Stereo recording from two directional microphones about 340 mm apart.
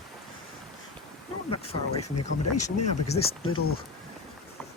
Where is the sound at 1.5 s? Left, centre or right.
Centre.